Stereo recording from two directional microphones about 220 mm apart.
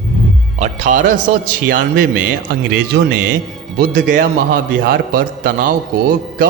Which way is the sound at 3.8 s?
45° right (ahead or behind).